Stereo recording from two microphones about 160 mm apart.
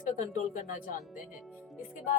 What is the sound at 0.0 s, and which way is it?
Speech, 55° left (ahead or behind).